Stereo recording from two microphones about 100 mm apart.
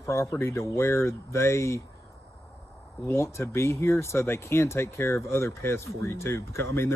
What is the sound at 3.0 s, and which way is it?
Speech, 30° left (ahead or behind).